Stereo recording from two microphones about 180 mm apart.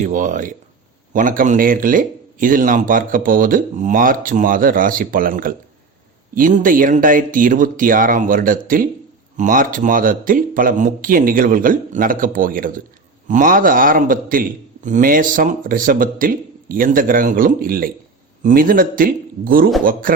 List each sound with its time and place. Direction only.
0.0 s speech: 45° right (ahead or behind)